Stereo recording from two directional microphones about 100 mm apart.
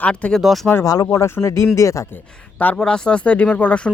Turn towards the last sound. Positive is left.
turn(degrees=10)  # may be behind; listen again after turning